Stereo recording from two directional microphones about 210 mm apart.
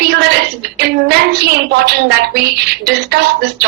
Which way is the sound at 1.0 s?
50° right (ahead or behind).